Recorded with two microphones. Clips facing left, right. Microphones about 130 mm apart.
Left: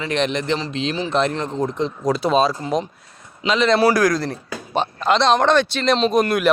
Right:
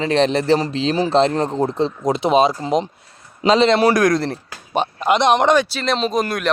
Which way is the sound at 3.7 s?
20° right (ahead or behind).